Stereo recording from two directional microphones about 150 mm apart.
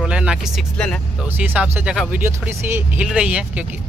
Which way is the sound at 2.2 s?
15° right (ahead or behind).